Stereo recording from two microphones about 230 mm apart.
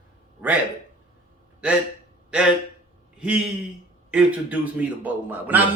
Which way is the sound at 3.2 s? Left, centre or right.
Centre.